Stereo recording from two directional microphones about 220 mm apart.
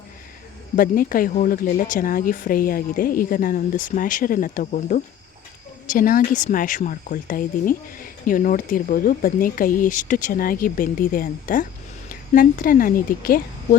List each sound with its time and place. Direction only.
0.8 s speech: 40° left (ahead or behind)